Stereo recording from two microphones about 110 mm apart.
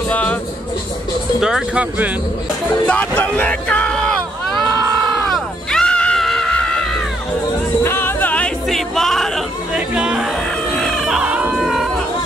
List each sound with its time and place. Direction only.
0.1 s music: 15° left (ahead or behind)
1.4 s speech: 10° right (ahead or behind)
2.9 s speech: 15° left (ahead or behind)
5.3 s music: 5° left (ahead or behind)
7.8 s music: 20° left (ahead or behind)
8.6 s music: 5° left (ahead or behind)
9.8 s music: 10° right (ahead or behind)
10.7 s a sound: 5° left (ahead or behind)
11.1 s a sound: 10° right (ahead or behind)